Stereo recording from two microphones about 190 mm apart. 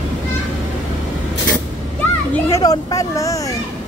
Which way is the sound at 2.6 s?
20° left (ahead or behind).